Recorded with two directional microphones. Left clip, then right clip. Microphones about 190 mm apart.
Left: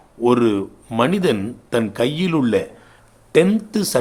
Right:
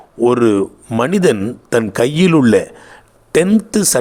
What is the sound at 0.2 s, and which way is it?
A man's voice, 35° right (ahead or behind).